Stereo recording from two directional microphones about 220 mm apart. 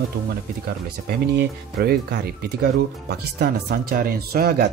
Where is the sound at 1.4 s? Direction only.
45° right (ahead or behind).